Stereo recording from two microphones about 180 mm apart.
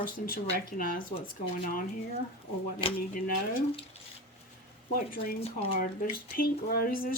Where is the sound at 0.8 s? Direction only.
50° left (ahead or behind).